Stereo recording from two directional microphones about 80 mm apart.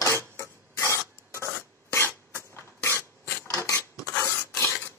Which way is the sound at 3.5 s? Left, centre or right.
Left.